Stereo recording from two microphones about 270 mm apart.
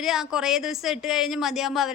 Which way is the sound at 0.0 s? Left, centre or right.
Centre.